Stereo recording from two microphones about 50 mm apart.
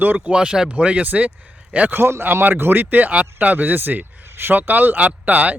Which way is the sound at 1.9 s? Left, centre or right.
Right.